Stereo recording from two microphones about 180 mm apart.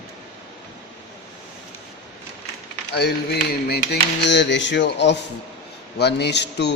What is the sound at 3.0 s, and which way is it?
Speech, 65° left (ahead or behind).